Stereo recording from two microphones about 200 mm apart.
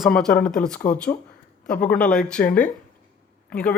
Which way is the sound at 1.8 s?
5° left (ahead or behind).